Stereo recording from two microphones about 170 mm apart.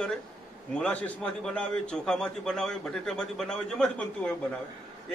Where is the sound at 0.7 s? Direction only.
10° left (ahead or behind).